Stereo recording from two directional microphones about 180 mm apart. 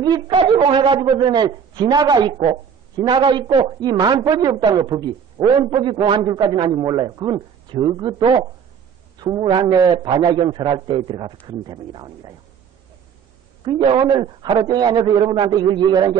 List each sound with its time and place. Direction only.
0.1 s a man's voice: 25° right (ahead or behind)
13.7 s a man's voice: 25° right (ahead or behind)